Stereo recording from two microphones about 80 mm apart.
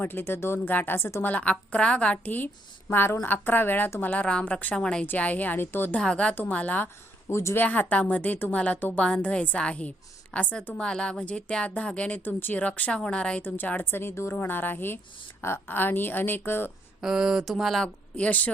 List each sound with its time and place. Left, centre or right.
0.0 s a woman's voice: left
1.3 s a woman's voice: centre
5.9 s a woman's voice: centre
7.3 s speech: left
7.6 s a woman's voice: left
13.4 s a woman's voice: left
17.0 s speech: centre
17.8 s speech: centre